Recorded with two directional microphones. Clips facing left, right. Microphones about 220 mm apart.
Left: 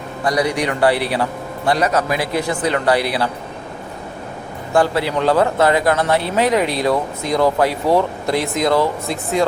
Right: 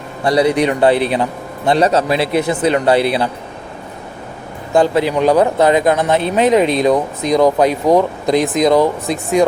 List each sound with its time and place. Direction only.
0.3 s a man's voice: 25° right (ahead or behind)
4.7 s a man's voice: 20° right (ahead or behind)